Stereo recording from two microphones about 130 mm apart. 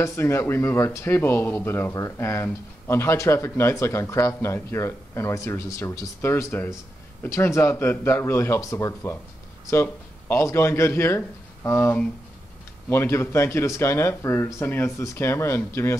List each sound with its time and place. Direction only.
0.0 s speech: 20° left (ahead or behind)